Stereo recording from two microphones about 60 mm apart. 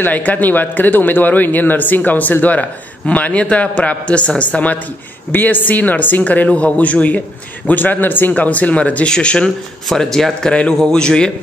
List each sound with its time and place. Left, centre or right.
0.0 s a man's voice: left